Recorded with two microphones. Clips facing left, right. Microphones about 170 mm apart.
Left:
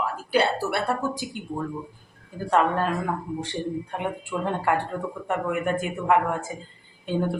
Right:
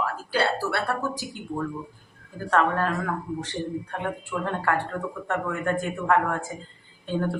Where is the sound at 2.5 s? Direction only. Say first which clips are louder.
Left 1 dB; 15° left (ahead or behind).